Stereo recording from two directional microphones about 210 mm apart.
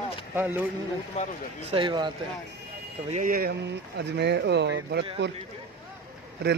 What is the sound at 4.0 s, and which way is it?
Speech, 55° right (ahead or behind).